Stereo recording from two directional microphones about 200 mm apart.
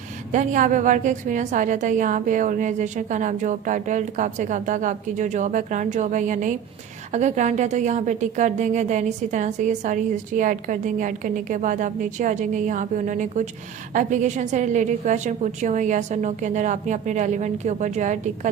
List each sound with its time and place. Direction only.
0.3 s a woman's voice: 40° right (ahead or behind)